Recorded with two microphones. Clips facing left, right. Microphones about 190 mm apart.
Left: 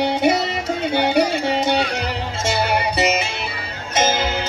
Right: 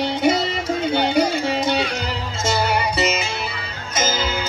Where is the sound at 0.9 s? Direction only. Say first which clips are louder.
Left 1 dB; 65° left (ahead or behind).